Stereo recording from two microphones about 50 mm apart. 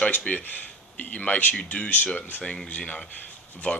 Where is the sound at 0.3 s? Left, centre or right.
Left.